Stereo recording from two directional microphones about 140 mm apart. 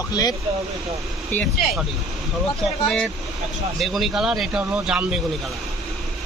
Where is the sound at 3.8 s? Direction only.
Centre (ahead or behind).